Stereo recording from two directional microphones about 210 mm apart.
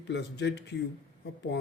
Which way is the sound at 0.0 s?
55° left (ahead or behind).